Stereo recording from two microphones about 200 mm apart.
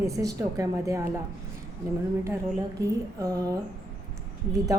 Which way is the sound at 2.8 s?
20° right (ahead or behind).